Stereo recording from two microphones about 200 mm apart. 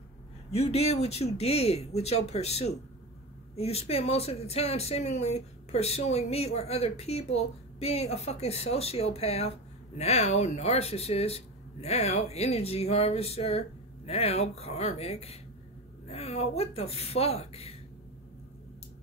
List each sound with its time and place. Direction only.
0.5 s speech: 30° left (ahead or behind)